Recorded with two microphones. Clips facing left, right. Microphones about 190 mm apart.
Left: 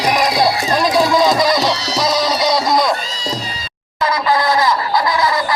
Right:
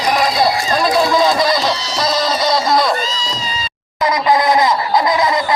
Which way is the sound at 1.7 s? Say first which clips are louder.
Left 2 dB; 70° left (ahead or behind).